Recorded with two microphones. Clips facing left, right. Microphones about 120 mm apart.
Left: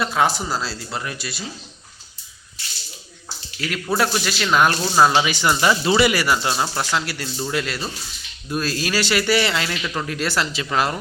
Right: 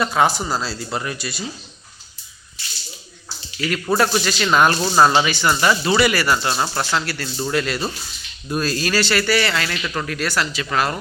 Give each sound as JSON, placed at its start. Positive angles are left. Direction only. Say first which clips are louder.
{"t": 0.0, "sound": "speech", "louder": "right 2 dB", "side_deg": 0}
{"t": 3.9, "sound": "speech", "louder": "right 2 dB", "side_deg": 5}
{"t": 5.3, "sound": "speech", "louder": "right 1 dB", "side_deg": 15}
{"t": 7.3, "sound": "speech", "louder": "right 4 dB", "side_deg": 0}
{"t": 9.8, "sound": "speech", "louder": "right 1 dB", "side_deg": 5}
{"t": 10.1, "sound": "speech", "louder": "even", "side_deg": 25}